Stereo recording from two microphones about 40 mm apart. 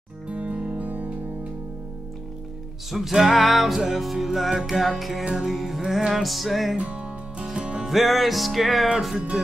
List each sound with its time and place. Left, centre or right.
0.3 s music: right
2.9 s music: centre
5.2 s music: centre
5.5 s music: centre
6.8 s music: right
7.8 s music: centre